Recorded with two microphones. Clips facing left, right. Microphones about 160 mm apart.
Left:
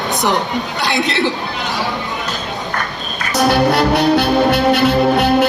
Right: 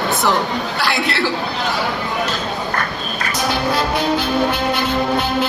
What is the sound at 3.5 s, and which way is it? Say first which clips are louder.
Music: left 6 dB; 70° left (ahead or behind).